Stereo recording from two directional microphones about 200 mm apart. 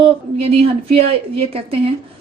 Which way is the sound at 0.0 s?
30° right (ahead or behind).